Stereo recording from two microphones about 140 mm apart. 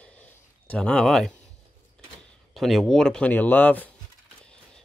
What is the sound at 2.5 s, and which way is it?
Speech, centre (ahead or behind).